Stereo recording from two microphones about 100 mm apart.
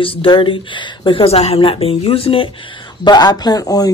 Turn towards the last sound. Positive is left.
turn(degrees=40)  # may be behind; listen again after turning